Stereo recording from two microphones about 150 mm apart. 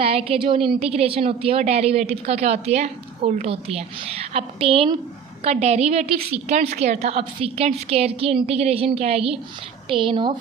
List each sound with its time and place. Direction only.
0.0 s a woman's voice: 40° right (ahead or behind)